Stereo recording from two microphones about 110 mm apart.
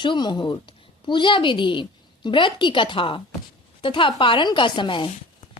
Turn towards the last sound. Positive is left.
turn(degrees=45)  # may be behind; listen again after turning